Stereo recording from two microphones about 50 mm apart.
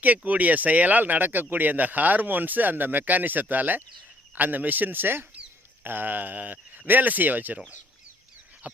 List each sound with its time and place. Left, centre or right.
0.3 s speech: right
8.6 s speech: right